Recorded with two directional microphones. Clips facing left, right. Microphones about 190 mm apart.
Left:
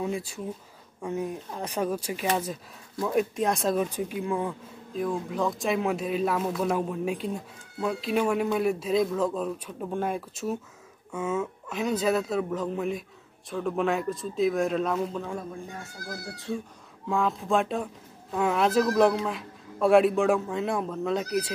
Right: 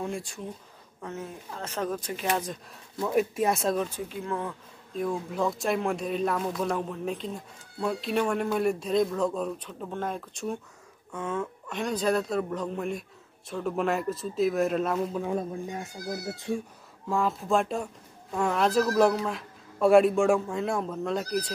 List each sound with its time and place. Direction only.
0.0 s speech: 5° left (ahead or behind)
3.8 s speech: 15° left (ahead or behind)
4.9 s speech: centre (ahead or behind)
15.2 s speech: 20° right (ahead or behind)
17.1 s speech: centre (ahead or behind)